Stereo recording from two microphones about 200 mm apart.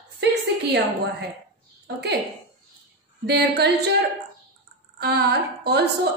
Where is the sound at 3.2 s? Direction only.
55° right (ahead or behind).